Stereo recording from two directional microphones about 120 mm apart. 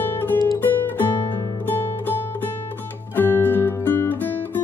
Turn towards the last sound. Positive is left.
turn(degrees=15)  # may be behind; listen again after turning